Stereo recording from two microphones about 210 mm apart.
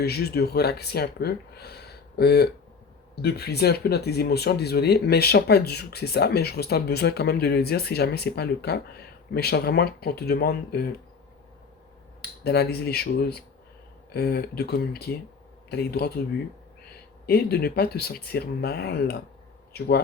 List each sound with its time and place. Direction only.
0.0 s speech: 50° left (ahead or behind)
12.2 s speech: 50° left (ahead or behind)
17.2 s speech: 50° left (ahead or behind)